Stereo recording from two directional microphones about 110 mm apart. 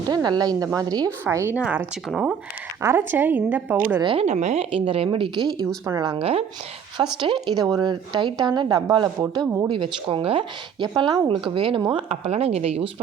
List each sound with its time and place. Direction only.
0.1 s speech: 35° right (ahead or behind)
1.2 s a woman's voice: 20° right (ahead or behind)
2.0 s speech: 5° right (ahead or behind)
2.8 s a woman's voice: 20° right (ahead or behind)
4.0 s speech: 50° right (ahead or behind)
4.3 s a woman's voice: 90° right
4.7 s speech: 55° right (ahead or behind)
5.6 s a woman's voice: 25° right (ahead or behind)
6.1 s speech: 60° right (ahead or behind)
7.2 s speech: 45° right (ahead or behind)
9.6 s speech: 50° right (ahead or behind)